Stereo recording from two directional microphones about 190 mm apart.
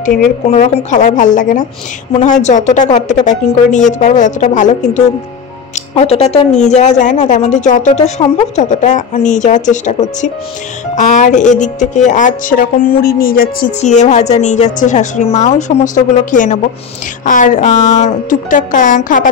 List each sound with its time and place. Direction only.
0.0 s a woman's voice: 50° left (ahead or behind)